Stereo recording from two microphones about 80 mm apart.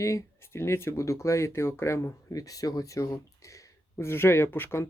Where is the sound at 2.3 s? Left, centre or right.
Left.